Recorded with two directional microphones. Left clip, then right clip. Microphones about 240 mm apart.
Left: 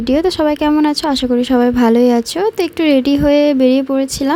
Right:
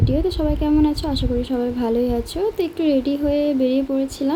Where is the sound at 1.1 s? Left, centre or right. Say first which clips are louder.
Left 8 dB; left.